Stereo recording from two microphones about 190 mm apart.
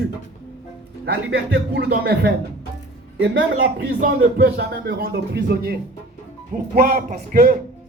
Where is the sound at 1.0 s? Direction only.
65° right (ahead or behind).